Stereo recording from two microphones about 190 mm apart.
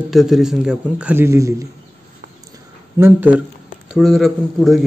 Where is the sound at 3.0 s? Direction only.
10° right (ahead or behind).